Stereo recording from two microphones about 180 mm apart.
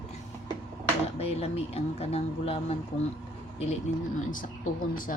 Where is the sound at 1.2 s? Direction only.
35° left (ahead or behind).